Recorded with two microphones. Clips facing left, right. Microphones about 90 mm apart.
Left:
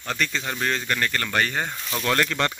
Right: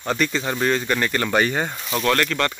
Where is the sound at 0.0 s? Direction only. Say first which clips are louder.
Right 5 dB; 10° right (ahead or behind).